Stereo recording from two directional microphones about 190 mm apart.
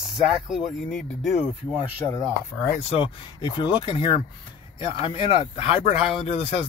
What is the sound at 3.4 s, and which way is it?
Speech, 25° left (ahead or behind).